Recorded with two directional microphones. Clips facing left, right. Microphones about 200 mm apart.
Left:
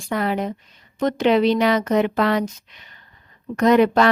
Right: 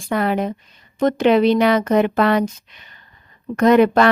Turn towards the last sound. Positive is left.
turn(degrees=-55)  # may be behind; listen again after turning